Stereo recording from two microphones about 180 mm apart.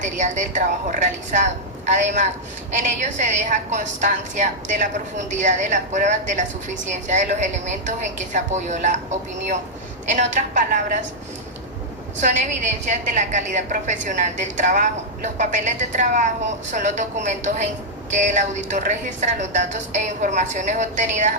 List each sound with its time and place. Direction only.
0.0 s a woman's voice: 40° right (ahead or behind)
10.1 s a woman's voice: 45° right (ahead or behind)
12.2 s a woman's voice: 40° right (ahead or behind)